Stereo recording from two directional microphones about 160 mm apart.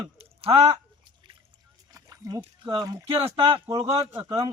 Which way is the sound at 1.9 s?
20° right (ahead or behind).